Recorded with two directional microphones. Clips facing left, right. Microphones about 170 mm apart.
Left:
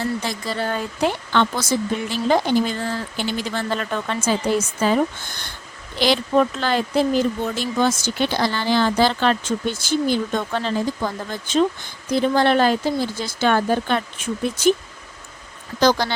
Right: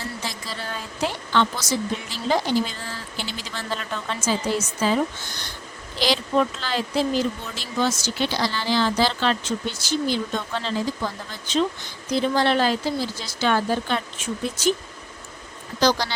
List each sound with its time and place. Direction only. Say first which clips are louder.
0.3 s speech: left 8 dB; 55° left (ahead or behind)
15.8 s speech: left 3 dB; 50° left (ahead or behind)